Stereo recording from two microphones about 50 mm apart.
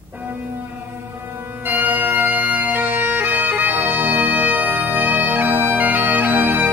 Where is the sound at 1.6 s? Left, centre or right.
Right.